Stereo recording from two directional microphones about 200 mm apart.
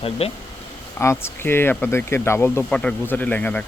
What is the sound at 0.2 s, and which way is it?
Speech, 30° left (ahead or behind).